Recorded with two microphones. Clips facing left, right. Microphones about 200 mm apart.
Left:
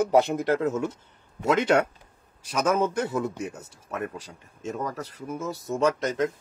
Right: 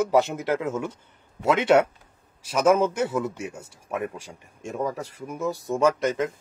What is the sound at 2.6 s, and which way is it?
Speech, 10° right (ahead or behind).